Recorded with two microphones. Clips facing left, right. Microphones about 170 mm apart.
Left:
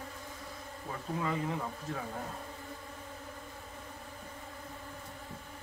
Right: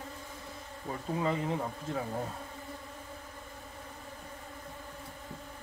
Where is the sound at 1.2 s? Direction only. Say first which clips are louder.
Right 3 dB; 25° right (ahead or behind).